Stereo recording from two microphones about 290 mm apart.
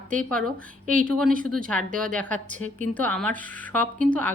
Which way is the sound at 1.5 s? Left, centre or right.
Centre.